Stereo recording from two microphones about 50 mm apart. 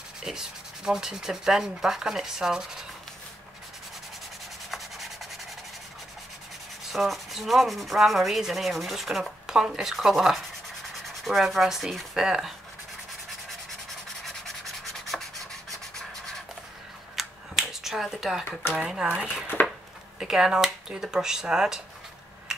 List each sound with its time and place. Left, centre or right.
0.2 s sanding: centre
4.6 s sanding: centre
6.9 s sanding: centre
15.1 s rub: centre
17.1 s a sound: centre
18.8 s sanding: centre
19.6 s a sound: left
20.2 s sanding: centre